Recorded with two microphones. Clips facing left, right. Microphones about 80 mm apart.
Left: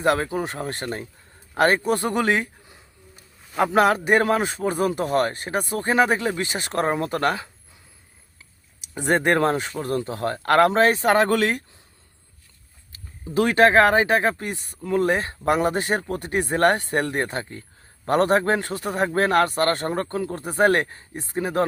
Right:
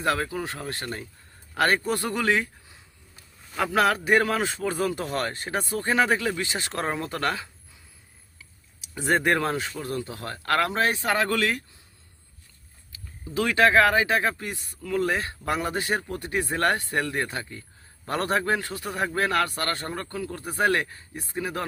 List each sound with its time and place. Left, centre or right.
0.0 s a man's voice: left
3.5 s a man's voice: centre
9.1 s a man's voice: left
13.2 s speech: left
16.1 s a man's voice: left